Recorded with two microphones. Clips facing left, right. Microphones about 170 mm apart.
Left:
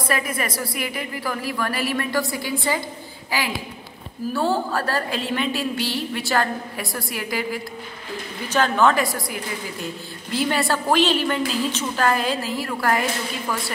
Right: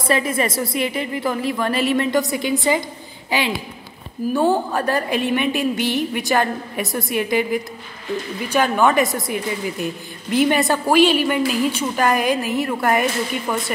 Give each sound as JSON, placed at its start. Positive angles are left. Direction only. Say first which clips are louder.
{"t": 0.0, "sound": "a woman's voice", "louder": "right 5 dB", "side_deg": -25}